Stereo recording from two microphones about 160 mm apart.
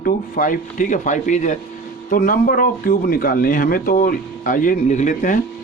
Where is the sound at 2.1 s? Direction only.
60° left (ahead or behind).